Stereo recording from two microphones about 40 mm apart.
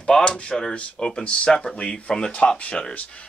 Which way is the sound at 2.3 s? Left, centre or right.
Left.